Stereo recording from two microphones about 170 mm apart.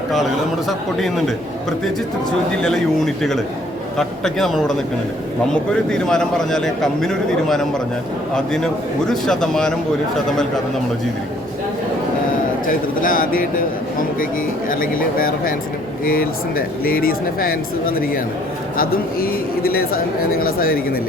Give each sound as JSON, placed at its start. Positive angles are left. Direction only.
{"t": 0.7, "sound": "a man's voice", "side_deg": 0}
{"t": 2.6, "sound": "a man's voice", "side_deg": 0}
{"t": 5.9, "sound": "a man's voice", "side_deg": 5}
{"t": 12.6, "sound": "speech", "side_deg": 55}
{"t": 14.7, "sound": "speech", "side_deg": 55}